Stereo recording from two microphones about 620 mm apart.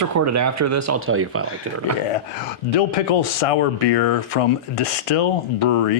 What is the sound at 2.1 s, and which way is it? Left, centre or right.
Speech, left.